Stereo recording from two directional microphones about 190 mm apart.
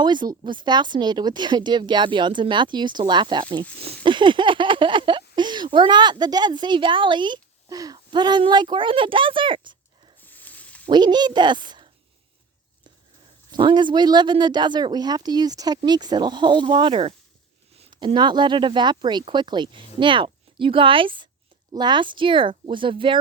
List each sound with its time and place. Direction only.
0.0 s speech: 25° right (ahead or behind)
10.2 s a sound: 10° left (ahead or behind)
10.8 s speech: 25° right (ahead or behind)
13.5 s speech: 25° right (ahead or behind)